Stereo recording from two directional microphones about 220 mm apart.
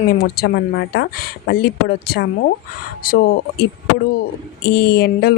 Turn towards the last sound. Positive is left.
turn(degrees=45)  # may be behind; listen again after turning